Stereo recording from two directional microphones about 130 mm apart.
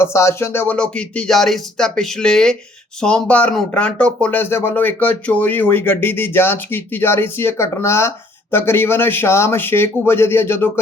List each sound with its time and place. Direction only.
0.0 s speech: 20° left (ahead or behind)